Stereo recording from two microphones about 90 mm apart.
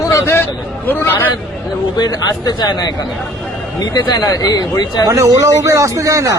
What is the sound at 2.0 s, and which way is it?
Speech, 50° left (ahead or behind).